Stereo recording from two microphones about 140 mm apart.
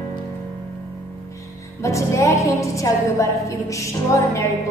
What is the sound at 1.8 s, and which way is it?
Music, 20° left (ahead or behind).